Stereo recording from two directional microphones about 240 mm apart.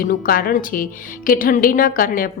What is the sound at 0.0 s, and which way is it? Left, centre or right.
A woman's voice, left.